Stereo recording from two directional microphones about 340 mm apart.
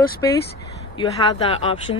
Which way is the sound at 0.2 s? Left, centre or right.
Centre.